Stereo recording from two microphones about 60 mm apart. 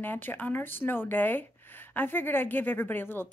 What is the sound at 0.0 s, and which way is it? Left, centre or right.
Speech, left.